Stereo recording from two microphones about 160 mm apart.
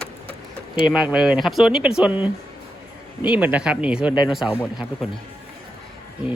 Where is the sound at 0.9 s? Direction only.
5° right (ahead or behind).